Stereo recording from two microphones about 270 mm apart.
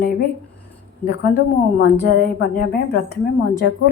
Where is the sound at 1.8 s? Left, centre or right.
Left.